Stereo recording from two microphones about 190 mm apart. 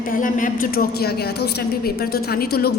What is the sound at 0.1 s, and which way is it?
A woman's voice, 45° left (ahead or behind).